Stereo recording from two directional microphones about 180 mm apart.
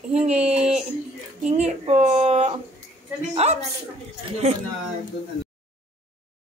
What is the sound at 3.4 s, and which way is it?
Speech, 35° right (ahead or behind).